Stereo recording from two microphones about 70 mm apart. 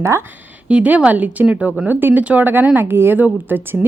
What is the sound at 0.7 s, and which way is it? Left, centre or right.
Speech, centre.